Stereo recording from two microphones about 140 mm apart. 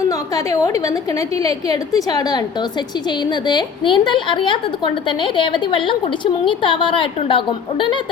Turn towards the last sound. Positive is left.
turn(degrees=35)  # may be behind; listen again after turning